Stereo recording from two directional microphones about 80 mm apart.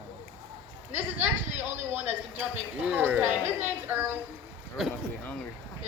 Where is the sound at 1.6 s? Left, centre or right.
Right.